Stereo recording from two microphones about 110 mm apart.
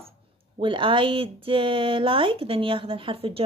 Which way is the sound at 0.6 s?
50° right (ahead or behind).